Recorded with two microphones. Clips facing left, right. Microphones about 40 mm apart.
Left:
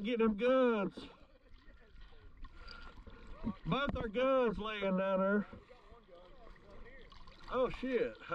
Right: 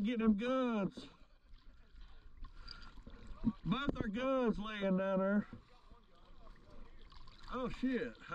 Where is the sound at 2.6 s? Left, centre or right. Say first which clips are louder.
Left 3 dB; left.